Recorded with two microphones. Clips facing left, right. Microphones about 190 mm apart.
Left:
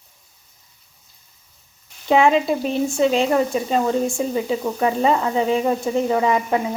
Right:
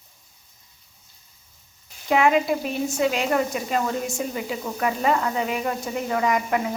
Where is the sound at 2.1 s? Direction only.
25° left (ahead or behind).